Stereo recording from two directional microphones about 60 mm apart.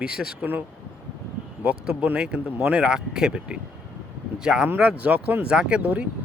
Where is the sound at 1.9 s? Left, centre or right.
Centre.